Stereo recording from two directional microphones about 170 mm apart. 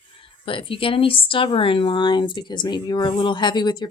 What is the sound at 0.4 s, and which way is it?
A woman's voice, 30° left (ahead or behind).